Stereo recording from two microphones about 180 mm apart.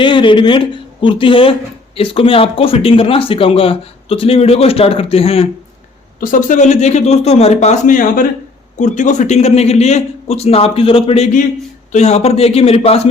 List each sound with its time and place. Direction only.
0.0 s a man's voice: 25° left (ahead or behind)
6.1 s speech: 45° left (ahead or behind)